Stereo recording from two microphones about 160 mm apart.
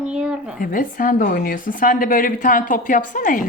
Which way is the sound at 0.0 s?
5° right (ahead or behind).